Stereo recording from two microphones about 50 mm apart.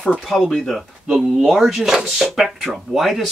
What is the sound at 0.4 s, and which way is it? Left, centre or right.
Speech, centre.